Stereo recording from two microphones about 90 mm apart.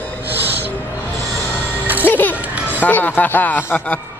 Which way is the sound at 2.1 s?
20° left (ahead or behind).